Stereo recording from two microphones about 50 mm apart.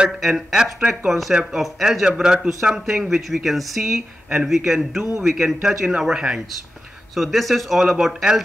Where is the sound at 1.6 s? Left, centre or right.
Centre.